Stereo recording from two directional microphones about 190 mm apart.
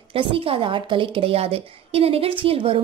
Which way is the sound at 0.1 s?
30° right (ahead or behind).